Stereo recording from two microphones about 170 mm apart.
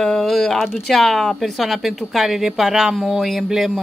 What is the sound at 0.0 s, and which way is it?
Speech, centre (ahead or behind).